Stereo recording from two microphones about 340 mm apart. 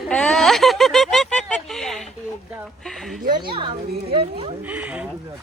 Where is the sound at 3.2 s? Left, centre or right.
Centre.